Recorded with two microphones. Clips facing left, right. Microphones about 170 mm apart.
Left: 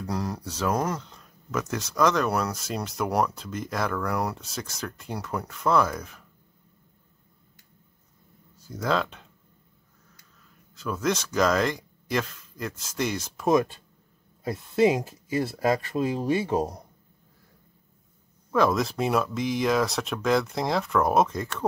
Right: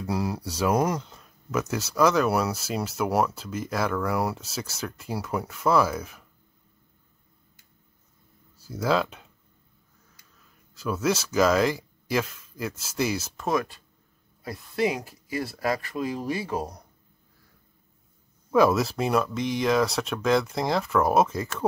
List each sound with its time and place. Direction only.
0.0 s speech: 5° right (ahead or behind)
8.5 s speech: 5° right (ahead or behind)
10.8 s speech: 5° right (ahead or behind)
13.5 s speech: 25° left (ahead or behind)
18.5 s speech: 5° right (ahead or behind)